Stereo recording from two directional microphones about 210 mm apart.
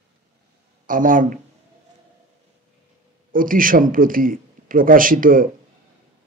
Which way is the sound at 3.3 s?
40° right (ahead or behind).